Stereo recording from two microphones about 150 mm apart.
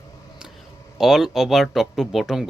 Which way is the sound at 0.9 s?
5° right (ahead or behind).